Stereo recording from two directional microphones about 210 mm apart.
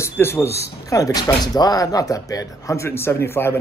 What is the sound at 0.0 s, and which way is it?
Speech, 10° left (ahead or behind).